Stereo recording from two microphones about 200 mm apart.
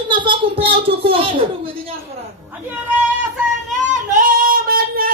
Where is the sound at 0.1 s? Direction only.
25° right (ahead or behind).